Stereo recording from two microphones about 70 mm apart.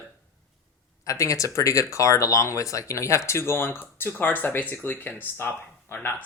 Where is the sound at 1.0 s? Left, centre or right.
Left.